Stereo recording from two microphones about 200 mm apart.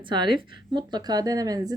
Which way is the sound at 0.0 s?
25° right (ahead or behind).